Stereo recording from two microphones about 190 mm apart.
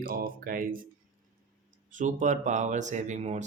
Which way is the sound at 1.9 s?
40° right (ahead or behind).